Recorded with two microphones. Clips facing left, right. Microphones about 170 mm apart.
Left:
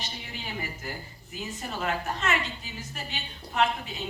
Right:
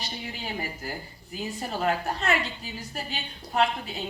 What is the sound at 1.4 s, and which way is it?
Speech, 35° right (ahead or behind).